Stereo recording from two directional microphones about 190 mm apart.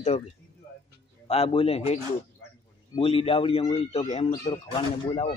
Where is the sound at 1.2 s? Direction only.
30° left (ahead or behind).